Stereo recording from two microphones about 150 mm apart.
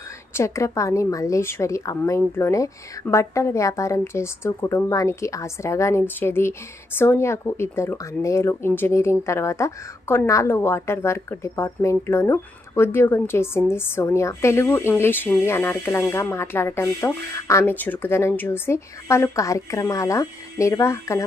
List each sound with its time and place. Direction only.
0.3 s a woman's voice: 20° left (ahead or behind)